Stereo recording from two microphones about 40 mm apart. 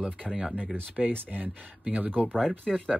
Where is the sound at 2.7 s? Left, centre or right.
Centre.